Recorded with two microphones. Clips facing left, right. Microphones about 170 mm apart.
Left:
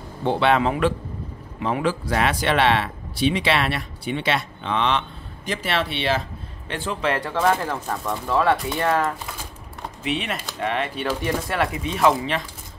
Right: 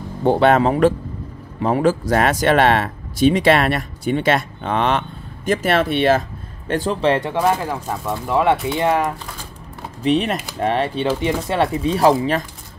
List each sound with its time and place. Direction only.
0.2 s speech: 45° right (ahead or behind)
6.7 s speech: 35° right (ahead or behind); by 9.1 s 15° right (ahead or behind)
10.0 s speech: 35° right (ahead or behind)
11.1 s speech: 20° right (ahead or behind)